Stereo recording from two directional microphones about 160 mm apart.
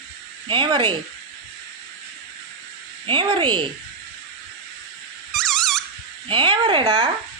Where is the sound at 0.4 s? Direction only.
30° right (ahead or behind).